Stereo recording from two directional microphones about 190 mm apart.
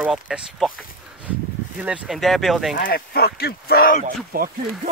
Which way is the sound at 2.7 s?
55° left (ahead or behind).